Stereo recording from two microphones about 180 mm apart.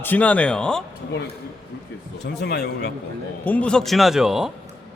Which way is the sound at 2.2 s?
70° left (ahead or behind).